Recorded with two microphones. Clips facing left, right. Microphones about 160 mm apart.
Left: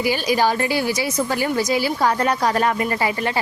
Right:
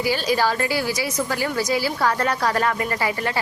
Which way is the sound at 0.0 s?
15° left (ahead or behind).